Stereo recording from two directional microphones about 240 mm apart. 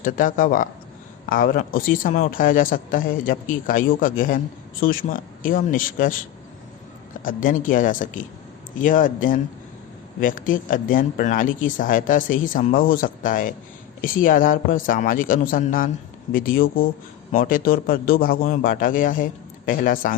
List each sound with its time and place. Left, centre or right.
0.0 s speech: left
7.3 s speech: left